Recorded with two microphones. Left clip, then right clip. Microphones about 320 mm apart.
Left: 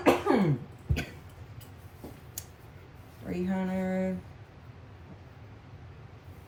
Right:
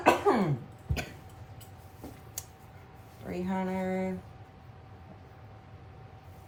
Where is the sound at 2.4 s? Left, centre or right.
Centre.